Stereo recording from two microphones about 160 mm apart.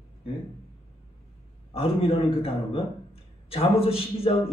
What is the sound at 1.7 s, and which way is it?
A man's voice, 35° left (ahead or behind).